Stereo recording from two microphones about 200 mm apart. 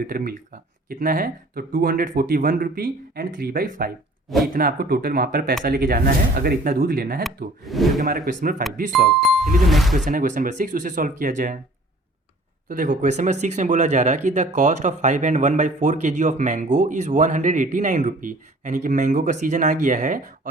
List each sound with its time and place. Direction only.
0.0 s speech: 45° right (ahead or behind)
7.6 s speech: centre (ahead or behind)
7.9 s speech: 50° right (ahead or behind)
8.9 s speech: centre (ahead or behind)
10.1 s speech: 40° right (ahead or behind)
12.6 s speech: 45° right (ahead or behind)